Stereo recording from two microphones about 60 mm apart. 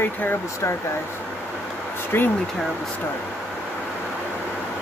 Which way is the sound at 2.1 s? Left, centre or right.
Left.